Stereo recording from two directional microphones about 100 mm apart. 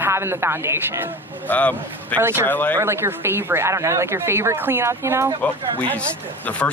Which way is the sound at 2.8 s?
25° right (ahead or behind).